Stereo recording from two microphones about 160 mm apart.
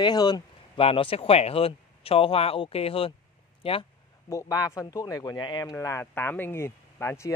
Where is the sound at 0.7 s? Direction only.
35° left (ahead or behind).